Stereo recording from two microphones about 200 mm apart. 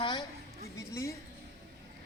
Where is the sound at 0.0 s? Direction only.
25° left (ahead or behind).